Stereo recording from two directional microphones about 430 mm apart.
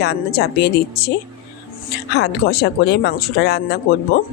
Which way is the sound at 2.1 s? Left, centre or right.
Left.